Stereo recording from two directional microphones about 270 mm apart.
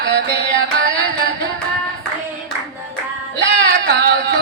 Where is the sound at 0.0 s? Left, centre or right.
Right.